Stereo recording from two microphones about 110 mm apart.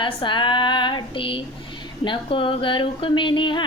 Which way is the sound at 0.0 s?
45° left (ahead or behind).